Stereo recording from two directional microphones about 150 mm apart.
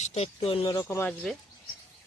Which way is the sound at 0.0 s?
45° left (ahead or behind).